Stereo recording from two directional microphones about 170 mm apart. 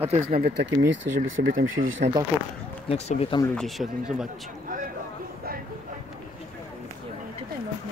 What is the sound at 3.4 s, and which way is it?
Speech, 5° left (ahead or behind).